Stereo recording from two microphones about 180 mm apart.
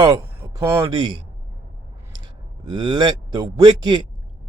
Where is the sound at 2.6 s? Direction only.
25° right (ahead or behind).